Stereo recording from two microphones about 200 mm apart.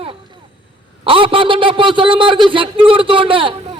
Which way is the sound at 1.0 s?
25° right (ahead or behind).